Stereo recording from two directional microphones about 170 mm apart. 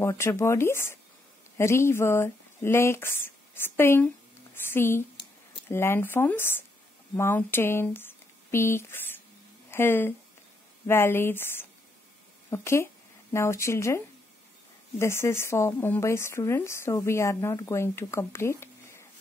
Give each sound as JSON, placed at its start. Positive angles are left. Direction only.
{"t": 0.0, "sound": "speech", "side_deg": 15}